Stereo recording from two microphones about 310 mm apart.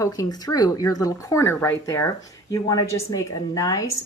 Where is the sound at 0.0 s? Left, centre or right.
Centre.